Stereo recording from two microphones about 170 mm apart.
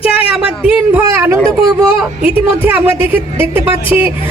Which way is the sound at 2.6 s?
10° right (ahead or behind).